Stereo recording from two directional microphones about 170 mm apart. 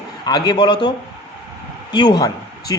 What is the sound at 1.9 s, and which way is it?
Speech, 25° left (ahead or behind).